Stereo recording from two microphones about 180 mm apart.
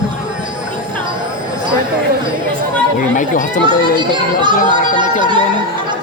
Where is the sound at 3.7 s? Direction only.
25° right (ahead or behind).